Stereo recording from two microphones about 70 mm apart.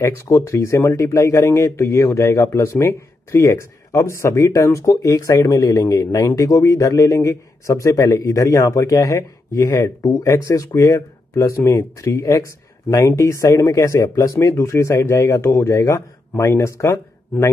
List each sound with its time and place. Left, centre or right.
0.0 s speech: left
11.3 s speech: left
16.3 s speech: left